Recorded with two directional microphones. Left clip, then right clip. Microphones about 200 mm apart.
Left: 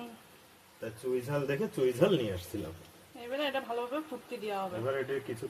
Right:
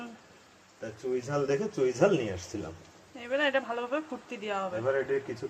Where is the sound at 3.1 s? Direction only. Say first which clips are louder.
Right 6 dB; centre (ahead or behind).